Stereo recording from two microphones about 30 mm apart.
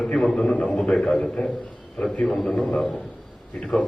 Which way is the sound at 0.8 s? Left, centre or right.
Left.